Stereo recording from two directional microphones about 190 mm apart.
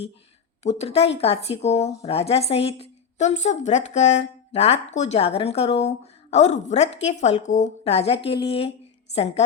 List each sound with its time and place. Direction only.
0.6 s speech: 35° left (ahead or behind)